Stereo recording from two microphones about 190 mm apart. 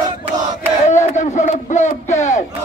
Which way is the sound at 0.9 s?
40° left (ahead or behind).